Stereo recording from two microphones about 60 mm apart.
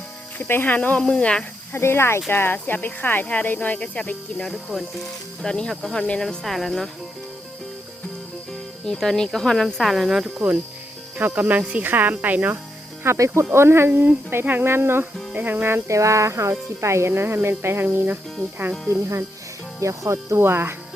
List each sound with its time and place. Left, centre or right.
0.3 s speech: left
0.8 s speech: left
1.7 s speech: left
4.4 s speech: centre
6.2 s speech: centre
8.9 s speech: centre
10.3 s speech: right
13.1 s speech: right
13.5 s speech: right
15.3 s speech: right
15.9 s speech: right
18.9 s speech: right
20.4 s speech: right